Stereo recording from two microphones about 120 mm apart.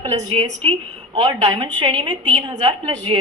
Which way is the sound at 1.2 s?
40° right (ahead or behind).